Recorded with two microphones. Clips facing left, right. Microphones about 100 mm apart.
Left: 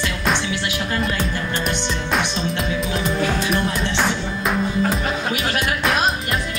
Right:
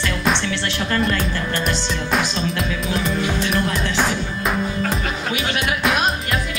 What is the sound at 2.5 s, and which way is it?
Music, centre (ahead or behind).